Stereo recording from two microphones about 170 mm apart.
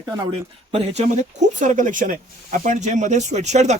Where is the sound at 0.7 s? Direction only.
40° right (ahead or behind).